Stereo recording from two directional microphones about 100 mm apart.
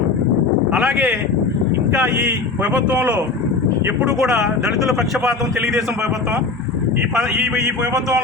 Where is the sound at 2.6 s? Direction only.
15° right (ahead or behind).